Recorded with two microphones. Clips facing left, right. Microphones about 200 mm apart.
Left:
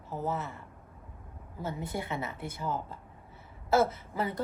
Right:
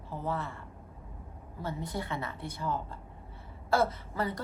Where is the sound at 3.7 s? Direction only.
25° left (ahead or behind).